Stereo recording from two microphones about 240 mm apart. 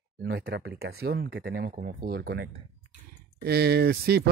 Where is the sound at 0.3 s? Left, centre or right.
Right.